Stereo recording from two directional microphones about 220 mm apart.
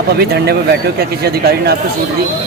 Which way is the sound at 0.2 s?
45° right (ahead or behind).